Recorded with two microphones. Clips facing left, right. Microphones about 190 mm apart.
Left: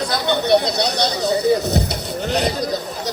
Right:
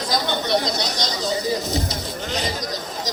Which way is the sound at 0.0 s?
65° left (ahead or behind).